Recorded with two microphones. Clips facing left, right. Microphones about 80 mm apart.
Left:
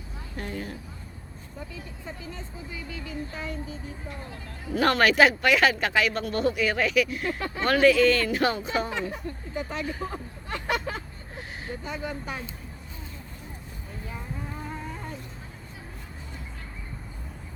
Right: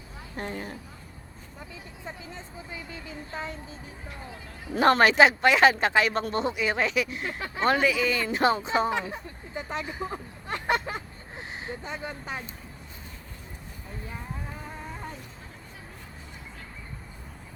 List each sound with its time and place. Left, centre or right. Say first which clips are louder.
0.3 s speech: even; right
2.3 s speech: left 1 dB; right
4.7 s speech: right 2 dB; right
7.8 s speech: left 6 dB; centre
8.3 s speech: right 2 dB; right